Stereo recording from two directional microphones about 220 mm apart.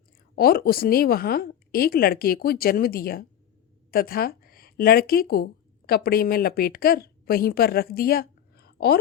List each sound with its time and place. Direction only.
0.3 s a woman's voice: 45° left (ahead or behind)